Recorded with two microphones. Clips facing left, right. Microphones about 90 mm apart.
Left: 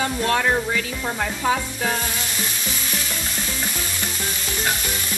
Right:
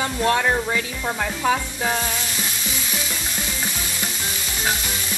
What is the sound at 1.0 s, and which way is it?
Speech, centre (ahead or behind).